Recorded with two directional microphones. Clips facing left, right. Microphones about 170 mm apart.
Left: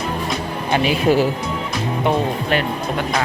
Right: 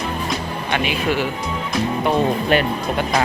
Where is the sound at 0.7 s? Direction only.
35° left (ahead or behind).